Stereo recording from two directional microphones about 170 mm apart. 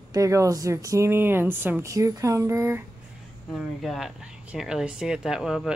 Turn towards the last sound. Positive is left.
turn(degrees=-5)  # may be behind; listen again after turning